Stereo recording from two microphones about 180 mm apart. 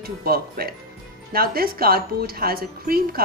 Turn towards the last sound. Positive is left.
turn(degrees=-55)  # may be behind; listen again after turning